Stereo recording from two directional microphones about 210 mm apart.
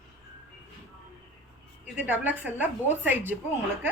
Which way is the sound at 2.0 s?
10° right (ahead or behind).